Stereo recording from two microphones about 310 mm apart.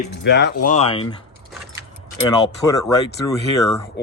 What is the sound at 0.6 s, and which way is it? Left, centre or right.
Speech, left.